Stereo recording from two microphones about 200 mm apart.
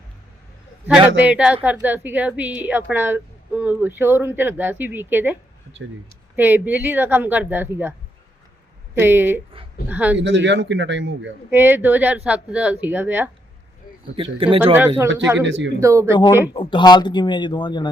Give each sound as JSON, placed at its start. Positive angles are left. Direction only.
{"t": 0.9, "sound": "a man's voice", "side_deg": -5}
{"t": 9.0, "sound": "speech", "side_deg": -10}
{"t": 10.2, "sound": "a man's voice", "side_deg": -65}
{"t": 11.5, "sound": "speech", "side_deg": -10}
{"t": 14.2, "sound": "speech", "side_deg": -25}
{"t": 14.6, "sound": "speech", "side_deg": -10}
{"t": 15.4, "sound": "speech", "side_deg": -65}
{"t": 15.8, "sound": "speech", "side_deg": -15}
{"t": 16.5, "sound": "speech", "side_deg": 25}